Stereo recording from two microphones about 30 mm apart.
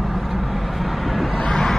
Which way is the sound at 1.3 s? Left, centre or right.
Left.